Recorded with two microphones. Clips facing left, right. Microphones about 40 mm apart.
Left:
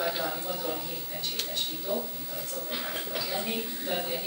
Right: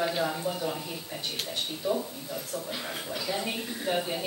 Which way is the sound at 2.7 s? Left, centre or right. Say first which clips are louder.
Even; centre.